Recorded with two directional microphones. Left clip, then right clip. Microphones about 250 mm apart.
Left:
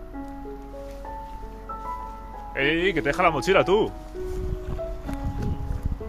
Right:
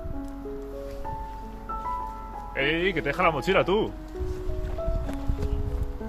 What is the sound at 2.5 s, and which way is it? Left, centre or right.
Speech, left.